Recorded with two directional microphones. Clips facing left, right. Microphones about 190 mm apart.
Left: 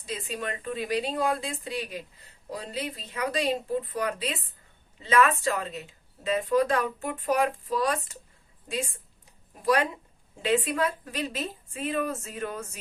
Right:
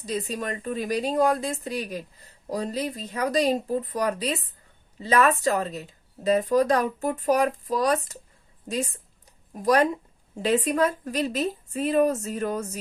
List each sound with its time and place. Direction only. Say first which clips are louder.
0.0 s a woman's voice: right 5 dB; 40° right (ahead or behind)